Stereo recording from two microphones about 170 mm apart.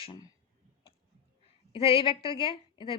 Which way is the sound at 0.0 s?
30° left (ahead or behind).